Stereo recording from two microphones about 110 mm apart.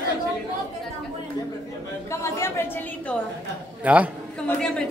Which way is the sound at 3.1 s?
15° left (ahead or behind).